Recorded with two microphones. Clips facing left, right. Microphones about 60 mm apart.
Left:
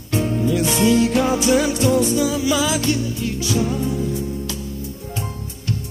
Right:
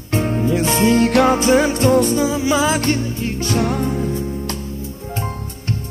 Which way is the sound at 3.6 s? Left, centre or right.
Right.